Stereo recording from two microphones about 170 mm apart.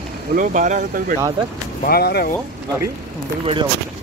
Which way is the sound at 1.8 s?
65° left (ahead or behind).